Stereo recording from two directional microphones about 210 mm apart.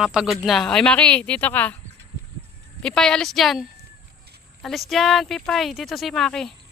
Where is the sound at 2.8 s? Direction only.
5° left (ahead or behind).